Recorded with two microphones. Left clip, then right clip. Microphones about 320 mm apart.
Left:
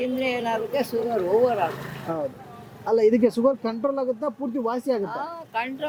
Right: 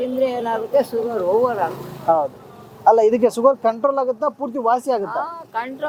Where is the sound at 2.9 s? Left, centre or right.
Right.